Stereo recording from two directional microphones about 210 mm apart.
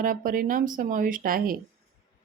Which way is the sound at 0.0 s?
40° right (ahead or behind).